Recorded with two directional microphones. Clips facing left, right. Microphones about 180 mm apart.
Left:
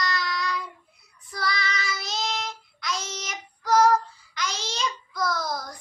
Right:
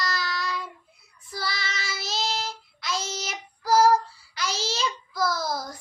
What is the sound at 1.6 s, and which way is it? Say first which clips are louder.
Child singing: left 3 dB; 30° right (ahead or behind).